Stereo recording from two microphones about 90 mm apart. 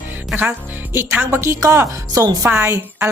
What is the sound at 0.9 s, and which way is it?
A woman's voice, 25° right (ahead or behind).